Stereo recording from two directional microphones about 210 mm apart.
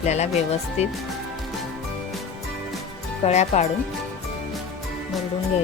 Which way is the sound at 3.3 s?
30° left (ahead or behind).